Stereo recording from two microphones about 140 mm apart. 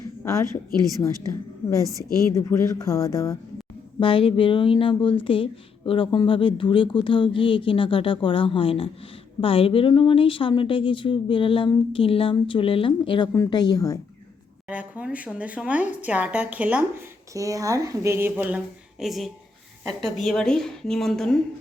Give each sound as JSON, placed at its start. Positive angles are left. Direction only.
{"t": 0.3, "sound": "speech", "side_deg": 20}
{"t": 2.3, "sound": "speech", "side_deg": 20}
{"t": 4.0, "sound": "speech", "side_deg": 35}
{"t": 14.7, "sound": "a woman's voice", "side_deg": -10}
{"t": 17.3, "sound": "a woman's voice", "side_deg": -25}